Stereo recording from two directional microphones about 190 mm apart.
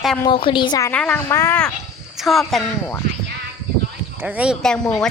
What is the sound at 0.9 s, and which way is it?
Speech, 5° left (ahead or behind).